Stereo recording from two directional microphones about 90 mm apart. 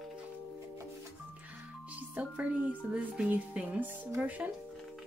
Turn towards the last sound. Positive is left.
turn(degrees=-20)  # may be behind; listen again after turning